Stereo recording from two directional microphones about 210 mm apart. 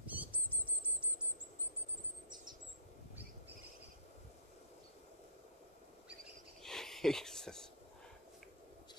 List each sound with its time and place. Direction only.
0.0 s bird flight: 5° right (ahead or behind)
2.2 s chirp: 20° right (ahead or behind)
6.6 s a sound: centre (ahead or behind)